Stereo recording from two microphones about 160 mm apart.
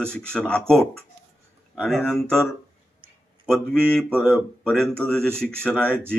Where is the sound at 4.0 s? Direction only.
5° left (ahead or behind).